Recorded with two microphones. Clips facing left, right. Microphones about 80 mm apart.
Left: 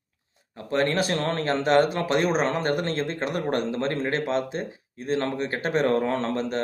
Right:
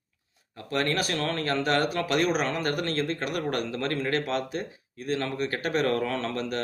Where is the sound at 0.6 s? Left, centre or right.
Left.